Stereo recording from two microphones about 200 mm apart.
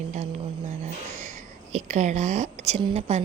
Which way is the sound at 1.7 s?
35° right (ahead or behind).